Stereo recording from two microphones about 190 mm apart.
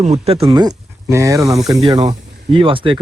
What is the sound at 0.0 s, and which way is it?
Speech, 35° right (ahead or behind).